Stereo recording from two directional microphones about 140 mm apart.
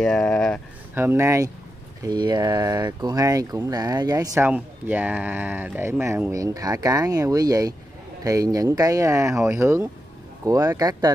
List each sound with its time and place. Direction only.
0.0 s a sound: 5° left (ahead or behind)
0.9 s speech: 15° right (ahead or behind)
4.5 s speech: 10° right (ahead or behind)
6.3 s speech: 25° right (ahead or behind)